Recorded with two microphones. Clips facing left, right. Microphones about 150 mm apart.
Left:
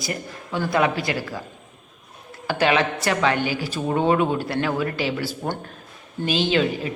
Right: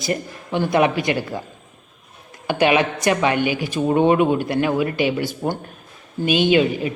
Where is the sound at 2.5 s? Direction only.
15° right (ahead or behind).